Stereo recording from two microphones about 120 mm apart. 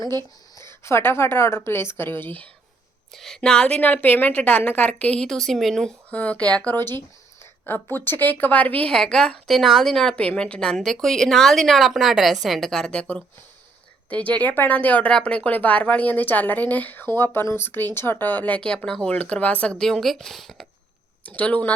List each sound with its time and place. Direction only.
0.5 s a woman's voice: 20° left (ahead or behind)
3.1 s speech: 5° left (ahead or behind)
21.2 s speech: 10° left (ahead or behind)